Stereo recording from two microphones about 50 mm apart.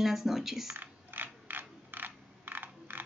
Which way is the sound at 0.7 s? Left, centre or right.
Right.